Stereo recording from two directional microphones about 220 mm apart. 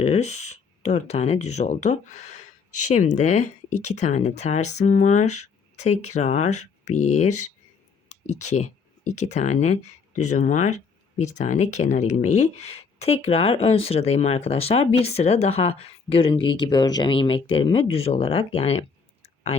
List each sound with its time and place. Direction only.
0.0 s speech: 30° left (ahead or behind)
8.5 s speech: 30° left (ahead or behind)